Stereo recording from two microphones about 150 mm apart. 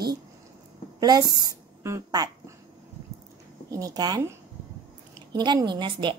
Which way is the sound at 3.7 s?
25° right (ahead or behind).